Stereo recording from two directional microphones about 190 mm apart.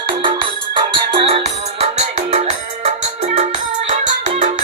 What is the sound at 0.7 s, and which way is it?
Music, 30° right (ahead or behind).